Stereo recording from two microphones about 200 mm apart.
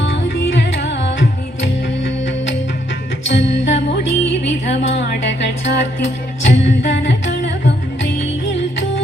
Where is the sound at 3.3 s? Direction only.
65° left (ahead or behind).